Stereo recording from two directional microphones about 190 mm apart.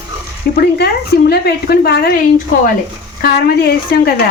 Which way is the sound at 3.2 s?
55° left (ahead or behind).